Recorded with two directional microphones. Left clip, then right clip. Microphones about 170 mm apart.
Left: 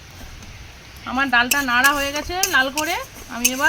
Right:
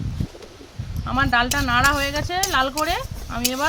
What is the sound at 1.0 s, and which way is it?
Speech, 15° right (ahead or behind).